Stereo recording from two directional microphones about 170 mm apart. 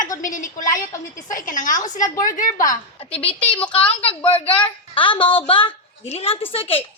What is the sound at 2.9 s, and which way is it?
A woman's voice, 35° left (ahead or behind).